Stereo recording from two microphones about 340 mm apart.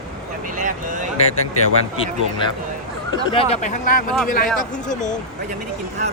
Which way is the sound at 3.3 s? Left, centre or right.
Centre.